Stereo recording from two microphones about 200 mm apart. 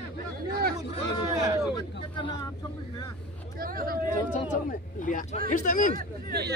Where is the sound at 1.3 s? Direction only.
20° right (ahead or behind).